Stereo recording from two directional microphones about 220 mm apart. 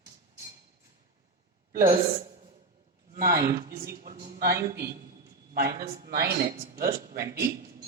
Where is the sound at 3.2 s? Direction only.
40° right (ahead or behind).